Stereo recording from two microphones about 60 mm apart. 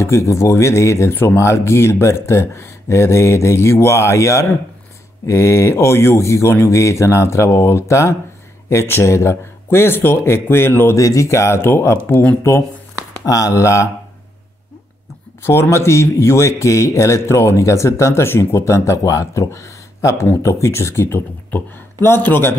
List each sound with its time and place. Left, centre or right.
0.0 s speech: left
11.0 s speech: left
12.1 s speech: left
13.2 s a man's voice: left
15.4 s a man's voice: left
21.5 s speech: left